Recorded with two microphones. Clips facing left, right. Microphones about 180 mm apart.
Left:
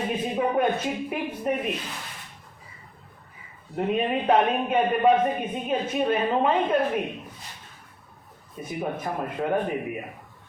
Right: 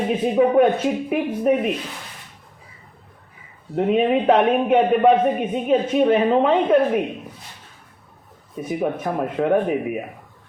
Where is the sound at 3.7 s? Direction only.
65° right (ahead or behind).